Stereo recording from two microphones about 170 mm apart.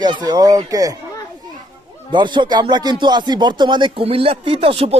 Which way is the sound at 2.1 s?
25° right (ahead or behind).